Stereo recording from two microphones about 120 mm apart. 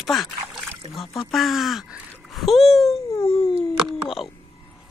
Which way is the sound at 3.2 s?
50° left (ahead or behind).